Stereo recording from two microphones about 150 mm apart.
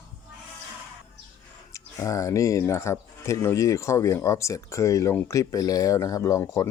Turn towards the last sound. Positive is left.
turn(degrees=20)  # may be behind; listen again after turning